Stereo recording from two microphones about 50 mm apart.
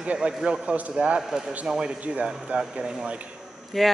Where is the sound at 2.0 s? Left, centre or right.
Right.